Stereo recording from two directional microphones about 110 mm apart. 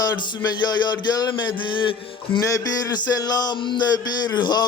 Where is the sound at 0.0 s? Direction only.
40° left (ahead or behind).